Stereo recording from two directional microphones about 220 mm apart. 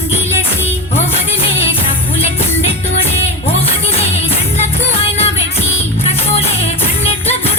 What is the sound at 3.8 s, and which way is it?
Music, 25° left (ahead or behind).